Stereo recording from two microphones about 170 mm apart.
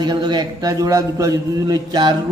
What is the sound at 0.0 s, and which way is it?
A man's voice, 25° right (ahead or behind).